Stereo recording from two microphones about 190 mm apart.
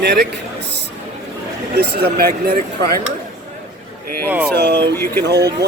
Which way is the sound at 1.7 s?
60° right (ahead or behind).